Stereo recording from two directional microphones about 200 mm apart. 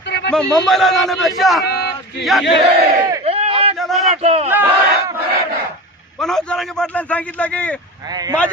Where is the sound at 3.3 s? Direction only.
30° right (ahead or behind).